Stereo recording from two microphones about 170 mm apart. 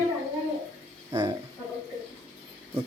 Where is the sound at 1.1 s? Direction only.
25° right (ahead or behind).